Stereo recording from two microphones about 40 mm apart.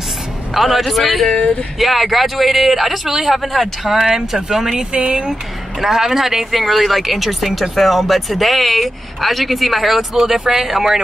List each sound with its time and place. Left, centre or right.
0.6 s speech: centre
1.3 s speech: left
1.8 s speech: centre
4.9 s speech: right
5.8 s speech: centre